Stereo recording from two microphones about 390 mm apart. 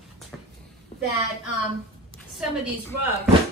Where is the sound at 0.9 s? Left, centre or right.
Centre.